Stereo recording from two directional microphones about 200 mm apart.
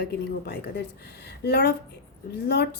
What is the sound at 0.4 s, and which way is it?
A woman's voice, 55° left (ahead or behind).